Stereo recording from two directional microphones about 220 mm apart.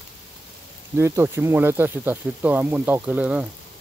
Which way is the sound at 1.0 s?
10° right (ahead or behind).